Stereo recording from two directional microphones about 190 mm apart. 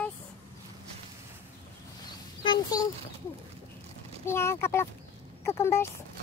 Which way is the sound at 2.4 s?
20° left (ahead or behind).